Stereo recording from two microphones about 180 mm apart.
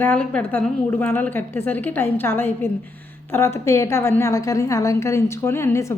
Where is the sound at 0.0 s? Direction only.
10° left (ahead or behind).